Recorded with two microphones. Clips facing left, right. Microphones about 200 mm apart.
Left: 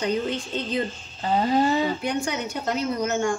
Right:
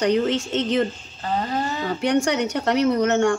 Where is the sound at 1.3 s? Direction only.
15° left (ahead or behind).